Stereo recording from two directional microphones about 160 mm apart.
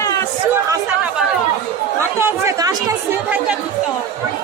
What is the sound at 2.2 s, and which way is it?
Chatter, 20° right (ahead or behind).